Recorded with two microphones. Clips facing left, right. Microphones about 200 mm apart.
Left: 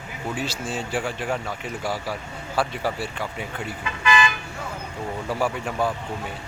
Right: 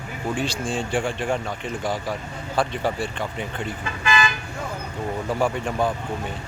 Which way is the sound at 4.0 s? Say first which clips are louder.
Left 1 dB; 35° right (ahead or behind).